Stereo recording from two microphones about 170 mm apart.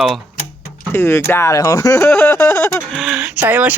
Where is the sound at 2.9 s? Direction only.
5° right (ahead or behind).